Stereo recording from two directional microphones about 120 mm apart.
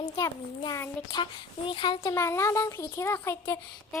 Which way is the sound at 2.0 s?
25° left (ahead or behind).